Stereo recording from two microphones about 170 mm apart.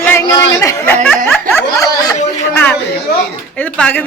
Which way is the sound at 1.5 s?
15° left (ahead or behind).